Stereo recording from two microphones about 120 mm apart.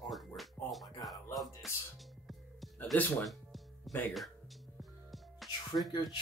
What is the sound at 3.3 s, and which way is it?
Music, centre (ahead or behind).